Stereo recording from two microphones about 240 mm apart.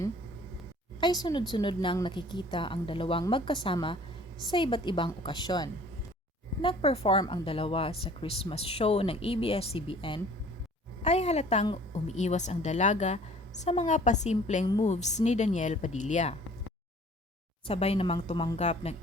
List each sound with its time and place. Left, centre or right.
0.9 s a woman's voice: centre
17.7 s a woman's voice: left